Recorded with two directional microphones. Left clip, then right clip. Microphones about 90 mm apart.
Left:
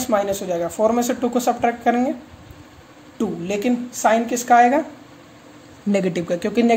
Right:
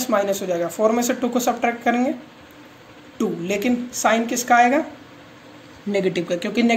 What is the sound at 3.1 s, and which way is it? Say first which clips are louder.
A woman's voice: right 1 dB; 40° left (ahead or behind).